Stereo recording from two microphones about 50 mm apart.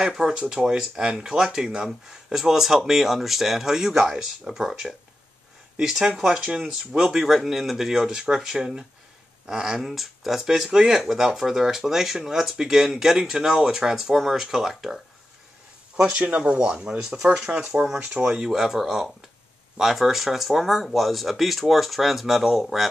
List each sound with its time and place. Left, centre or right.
0.0 s speech: centre
16.1 s speech: right
17.2 s speech: centre
17.7 s speech: right
18.1 s speech: centre